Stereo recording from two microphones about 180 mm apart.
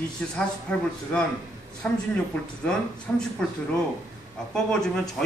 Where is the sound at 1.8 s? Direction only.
10° left (ahead or behind).